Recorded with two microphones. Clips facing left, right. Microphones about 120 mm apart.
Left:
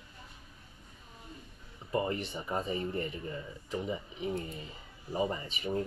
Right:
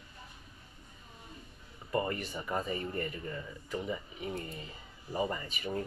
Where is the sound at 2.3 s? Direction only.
25° left (ahead or behind).